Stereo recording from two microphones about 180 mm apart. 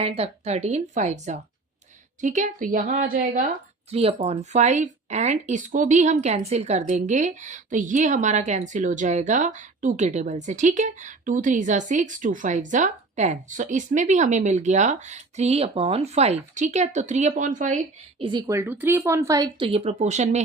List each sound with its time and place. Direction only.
0.0 s a woman's voice: 35° right (ahead or behind); by 3.5 s 50° right (ahead or behind)
3.9 s speech: 35° right (ahead or behind)
18.2 s speech: 25° right (ahead or behind); by 20.4 s 40° right (ahead or behind)